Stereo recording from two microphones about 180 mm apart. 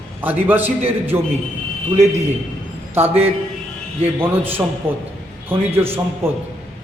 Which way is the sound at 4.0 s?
10° right (ahead or behind).